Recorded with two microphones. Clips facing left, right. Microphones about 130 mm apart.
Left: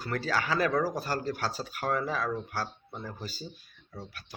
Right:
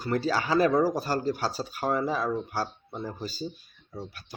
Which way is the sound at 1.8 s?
25° right (ahead or behind).